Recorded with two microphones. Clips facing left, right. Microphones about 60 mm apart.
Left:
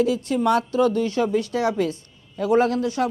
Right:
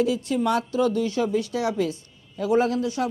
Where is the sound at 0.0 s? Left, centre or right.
Left.